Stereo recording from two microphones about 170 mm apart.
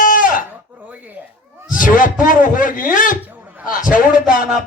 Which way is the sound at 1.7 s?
50° left (ahead or behind).